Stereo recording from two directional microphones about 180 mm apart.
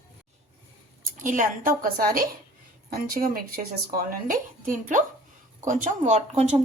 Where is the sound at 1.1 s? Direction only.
45° right (ahead or behind).